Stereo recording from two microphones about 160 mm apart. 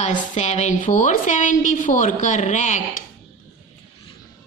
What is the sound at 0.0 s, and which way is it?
A woman's voice, 45° left (ahead or behind).